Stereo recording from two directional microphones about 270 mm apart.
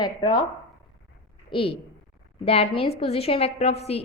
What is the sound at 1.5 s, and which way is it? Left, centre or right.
A woman's voice, centre.